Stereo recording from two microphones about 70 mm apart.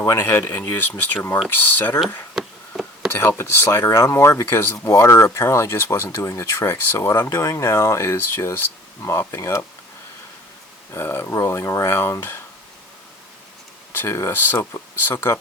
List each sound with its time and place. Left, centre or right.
0.0 s speech: left
2.3 s a sound: centre
3.1 s speech: left
4.9 s speech: left
10.9 s speech: left
13.9 s speech: left